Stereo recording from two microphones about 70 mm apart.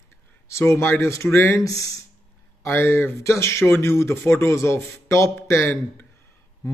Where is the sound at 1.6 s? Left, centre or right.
Left.